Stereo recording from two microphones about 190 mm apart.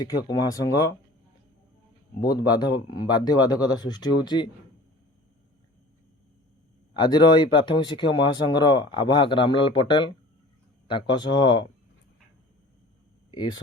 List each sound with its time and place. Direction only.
0.0 s speech: 20° left (ahead or behind)
2.2 s speech: 20° left (ahead or behind)
7.0 s speech: 20° left (ahead or behind)
13.3 s speech: 25° left (ahead or behind)